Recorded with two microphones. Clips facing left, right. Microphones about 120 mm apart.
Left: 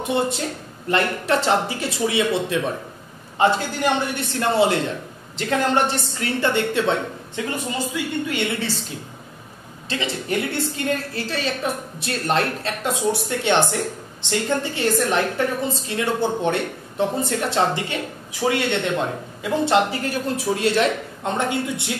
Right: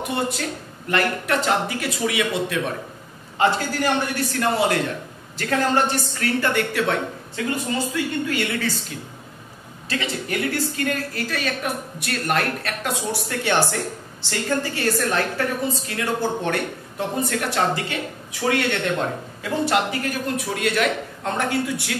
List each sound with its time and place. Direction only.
0.0 s a woman's voice: 25° left (ahead or behind)
9.8 s a woman's voice: 25° left (ahead or behind)